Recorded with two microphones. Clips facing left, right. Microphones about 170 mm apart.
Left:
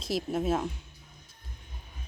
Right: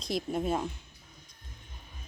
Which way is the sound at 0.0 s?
5° left (ahead or behind).